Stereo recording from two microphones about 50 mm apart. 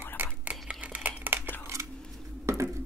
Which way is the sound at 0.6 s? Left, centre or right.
Right.